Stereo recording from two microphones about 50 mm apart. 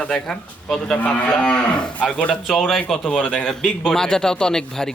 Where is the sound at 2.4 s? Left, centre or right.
Centre.